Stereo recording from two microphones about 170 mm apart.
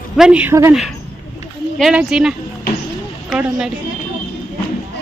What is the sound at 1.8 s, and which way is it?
A woman's voice, 5° right (ahead or behind).